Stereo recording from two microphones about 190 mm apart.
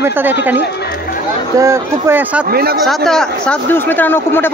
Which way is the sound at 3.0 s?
5° left (ahead or behind).